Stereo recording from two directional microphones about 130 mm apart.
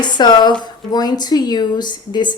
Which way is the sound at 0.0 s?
35° left (ahead or behind).